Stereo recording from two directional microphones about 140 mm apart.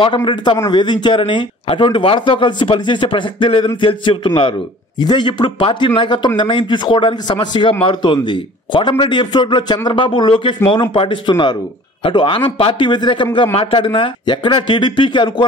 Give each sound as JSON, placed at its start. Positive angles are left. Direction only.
{"t": 0.0, "sound": "speech", "side_deg": 35}